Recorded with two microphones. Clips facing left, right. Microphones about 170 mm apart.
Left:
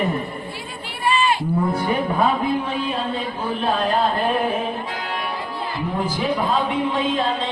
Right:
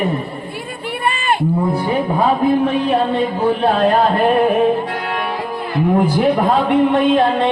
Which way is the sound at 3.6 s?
65° right (ahead or behind).